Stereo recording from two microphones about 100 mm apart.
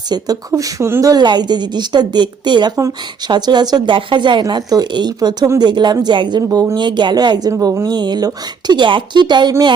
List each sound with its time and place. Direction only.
0.1 s speech: 40° right (ahead or behind)
1.1 s speech: 45° right (ahead or behind)
7.9 s speech: 45° right (ahead or behind)